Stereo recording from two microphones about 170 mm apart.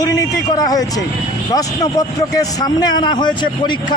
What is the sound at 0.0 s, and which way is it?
A man's voice, 20° left (ahead or behind).